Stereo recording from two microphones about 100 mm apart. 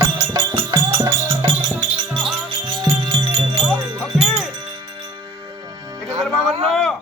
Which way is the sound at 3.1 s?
80° right.